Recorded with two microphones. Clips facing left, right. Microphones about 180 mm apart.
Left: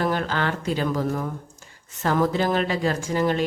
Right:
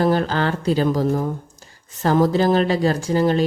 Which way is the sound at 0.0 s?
35° right (ahead or behind).